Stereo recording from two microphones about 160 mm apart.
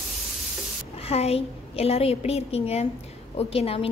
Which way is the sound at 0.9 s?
40° left (ahead or behind).